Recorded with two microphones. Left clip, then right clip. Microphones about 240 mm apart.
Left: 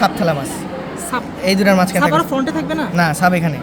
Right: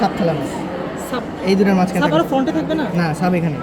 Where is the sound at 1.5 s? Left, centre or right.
Left.